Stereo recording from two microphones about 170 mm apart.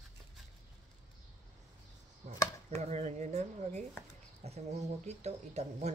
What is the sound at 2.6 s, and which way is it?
Speech, 40° right (ahead or behind).